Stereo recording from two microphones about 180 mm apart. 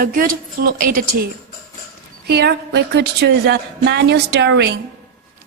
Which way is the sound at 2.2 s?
65° right (ahead or behind).